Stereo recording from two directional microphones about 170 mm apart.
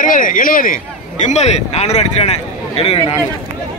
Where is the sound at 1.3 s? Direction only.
40° left (ahead or behind).